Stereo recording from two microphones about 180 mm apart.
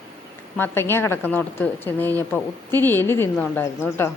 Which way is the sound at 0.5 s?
10° left (ahead or behind).